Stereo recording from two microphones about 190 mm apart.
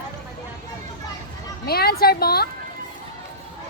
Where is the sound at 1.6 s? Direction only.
55° left (ahead or behind).